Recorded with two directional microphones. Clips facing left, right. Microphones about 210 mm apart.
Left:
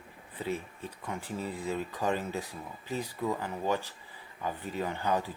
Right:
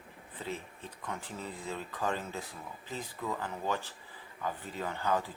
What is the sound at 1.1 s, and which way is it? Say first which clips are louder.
Speech: left 4 dB; 10° left (ahead or behind).